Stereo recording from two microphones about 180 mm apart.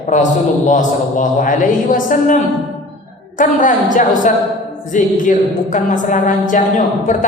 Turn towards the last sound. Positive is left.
turn(degrees=45)  # may be behind; listen again after turning